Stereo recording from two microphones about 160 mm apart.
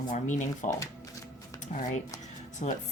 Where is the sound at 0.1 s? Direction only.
50° left (ahead or behind).